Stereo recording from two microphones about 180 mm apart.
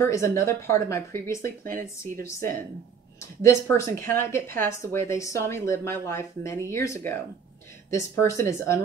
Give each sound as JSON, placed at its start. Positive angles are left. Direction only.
{"t": 0.0, "sound": "a woman's voice", "side_deg": 15}
{"t": 1.6, "sound": "speech", "side_deg": -50}
{"t": 3.2, "sound": "a woman's voice", "side_deg": 15}